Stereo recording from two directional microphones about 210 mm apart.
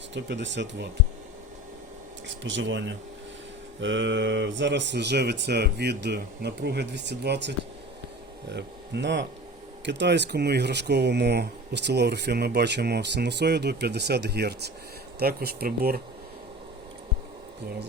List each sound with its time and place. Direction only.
0.1 s speech: 60° right (ahead or behind)
2.2 s speech: 60° right (ahead or behind)